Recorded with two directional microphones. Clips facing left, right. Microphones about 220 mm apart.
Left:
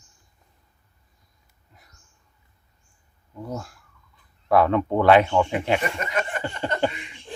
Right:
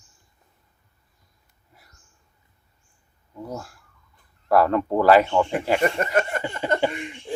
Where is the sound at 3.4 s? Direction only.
5° right (ahead or behind).